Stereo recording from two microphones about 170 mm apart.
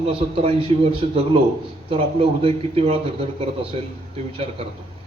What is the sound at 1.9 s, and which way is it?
A man's voice, 35° right (ahead or behind).